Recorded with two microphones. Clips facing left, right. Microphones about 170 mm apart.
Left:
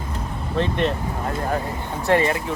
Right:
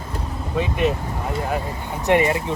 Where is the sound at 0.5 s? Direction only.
5° right (ahead or behind).